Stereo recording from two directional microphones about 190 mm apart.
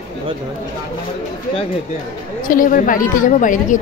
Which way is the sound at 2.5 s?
45° left (ahead or behind).